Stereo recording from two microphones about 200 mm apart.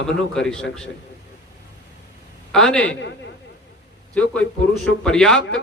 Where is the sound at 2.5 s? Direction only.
5° left (ahead or behind).